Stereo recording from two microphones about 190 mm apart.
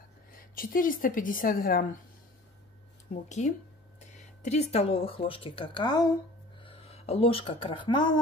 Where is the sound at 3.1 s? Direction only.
40° left (ahead or behind); by 6.1 s 20° left (ahead or behind).